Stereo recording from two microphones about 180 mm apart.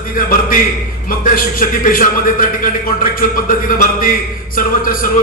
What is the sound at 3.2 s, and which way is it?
A man's voice, 50° left (ahead or behind).